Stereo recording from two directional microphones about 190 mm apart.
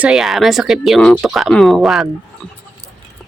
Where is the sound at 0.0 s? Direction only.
Centre (ahead or behind).